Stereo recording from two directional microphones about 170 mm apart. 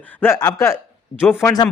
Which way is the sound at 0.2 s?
15° left (ahead or behind).